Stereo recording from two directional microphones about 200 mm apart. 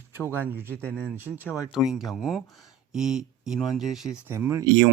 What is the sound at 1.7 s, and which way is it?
Speech, 5° right (ahead or behind).